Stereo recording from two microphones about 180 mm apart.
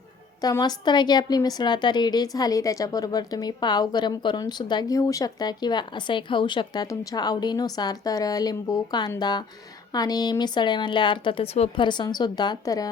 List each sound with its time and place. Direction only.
0.4 s a woman's voice: 20° left (ahead or behind)